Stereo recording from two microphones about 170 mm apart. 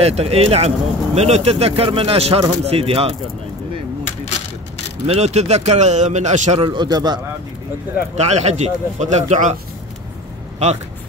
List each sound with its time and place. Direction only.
0.0 s speech: 35° right (ahead or behind)
5.0 s speech: 40° right (ahead or behind)
6.6 s a man's voice: 25° right (ahead or behind)
8.2 s speech: 40° right (ahead or behind)